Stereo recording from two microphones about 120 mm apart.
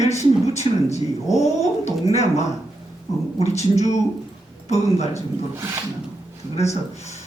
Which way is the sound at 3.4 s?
70° left (ahead or behind).